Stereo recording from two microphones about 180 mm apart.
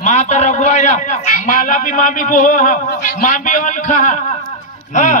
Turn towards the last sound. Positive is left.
turn(degrees=45)  # may be behind; listen again after turning